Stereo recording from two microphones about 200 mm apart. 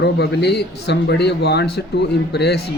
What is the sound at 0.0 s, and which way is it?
A man's voice, 55° left (ahead or behind).